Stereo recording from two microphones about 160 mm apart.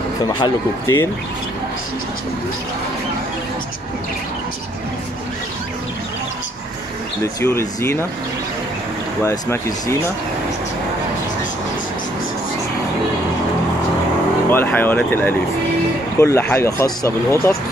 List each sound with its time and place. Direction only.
0.4 s speech: 20° left (ahead or behind)
7.4 s speech: 15° left (ahead or behind)
9.2 s speech: 20° left (ahead or behind)
14.5 s speech: 10° left (ahead or behind)